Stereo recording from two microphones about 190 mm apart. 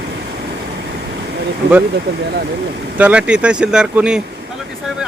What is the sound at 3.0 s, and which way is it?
Speech, 5° right (ahead or behind).